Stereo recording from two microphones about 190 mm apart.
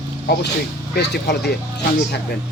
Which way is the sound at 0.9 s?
60° left (ahead or behind).